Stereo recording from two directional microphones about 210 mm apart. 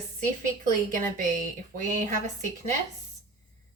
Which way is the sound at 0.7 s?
40° right (ahead or behind).